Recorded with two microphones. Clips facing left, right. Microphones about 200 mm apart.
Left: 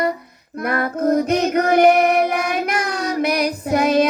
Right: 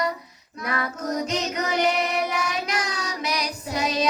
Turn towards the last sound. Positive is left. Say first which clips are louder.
# left 10 dB
turn(degrees=55)  # may be behind; listen again after turning